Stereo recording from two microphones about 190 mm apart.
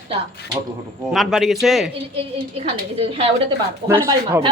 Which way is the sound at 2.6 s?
30° right (ahead or behind).